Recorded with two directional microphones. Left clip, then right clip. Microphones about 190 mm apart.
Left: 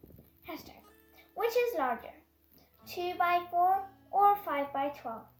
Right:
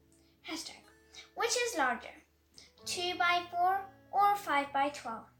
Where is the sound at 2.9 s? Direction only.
45° left (ahead or behind).